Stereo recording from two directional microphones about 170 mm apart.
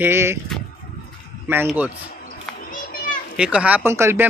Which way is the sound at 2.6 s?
50° left (ahead or behind).